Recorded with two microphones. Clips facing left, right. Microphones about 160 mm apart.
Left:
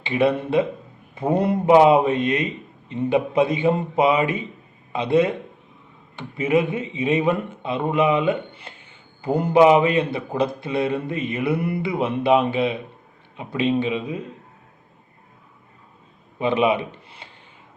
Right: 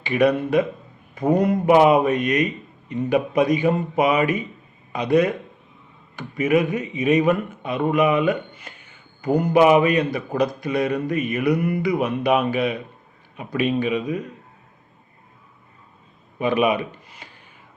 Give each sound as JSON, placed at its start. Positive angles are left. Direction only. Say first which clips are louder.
{"t": 0.0, "sound": "speech", "louder": "right 1 dB", "side_deg": 25}
{"t": 16.4, "sound": "speech", "louder": "even", "side_deg": 25}